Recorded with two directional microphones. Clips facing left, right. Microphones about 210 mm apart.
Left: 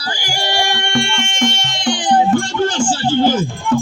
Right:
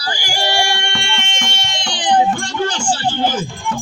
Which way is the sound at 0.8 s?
45° left (ahead or behind).